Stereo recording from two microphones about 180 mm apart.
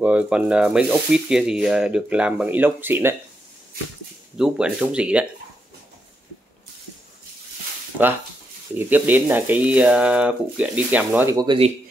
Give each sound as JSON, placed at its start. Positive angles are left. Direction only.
{"t": 0.0, "sound": "speech", "side_deg": -5}
{"t": 4.4, "sound": "speech", "side_deg": -5}
{"t": 8.7, "sound": "speech", "side_deg": -10}
{"t": 11.3, "sound": "speech", "side_deg": -25}